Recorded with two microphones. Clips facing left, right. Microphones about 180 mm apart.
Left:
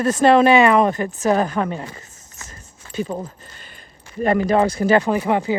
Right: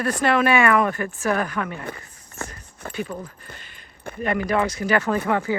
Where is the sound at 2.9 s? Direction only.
35° left (ahead or behind).